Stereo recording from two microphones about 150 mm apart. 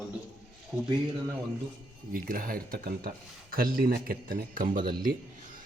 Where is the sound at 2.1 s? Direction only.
70° right (ahead or behind).